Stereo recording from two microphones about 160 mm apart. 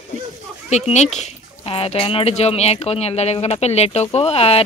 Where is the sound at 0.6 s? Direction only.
45° left (ahead or behind).